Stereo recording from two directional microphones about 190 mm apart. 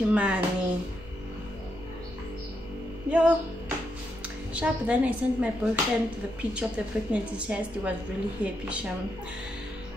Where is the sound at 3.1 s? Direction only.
10° right (ahead or behind).